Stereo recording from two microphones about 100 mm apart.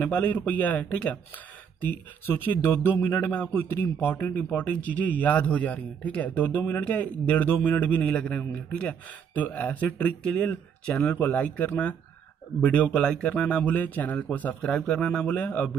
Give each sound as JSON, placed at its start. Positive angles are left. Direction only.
{"t": 0.0, "sound": "a man's voice", "side_deg": 15}
{"t": 2.2, "sound": "a man's voice", "side_deg": 20}